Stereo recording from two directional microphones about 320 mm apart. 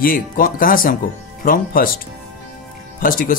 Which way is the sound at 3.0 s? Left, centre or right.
Left.